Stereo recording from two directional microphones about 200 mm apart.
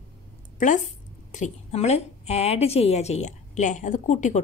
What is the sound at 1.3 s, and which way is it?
A woman's voice, 35° left (ahead or behind).